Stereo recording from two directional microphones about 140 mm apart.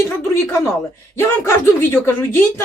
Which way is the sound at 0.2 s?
15° left (ahead or behind).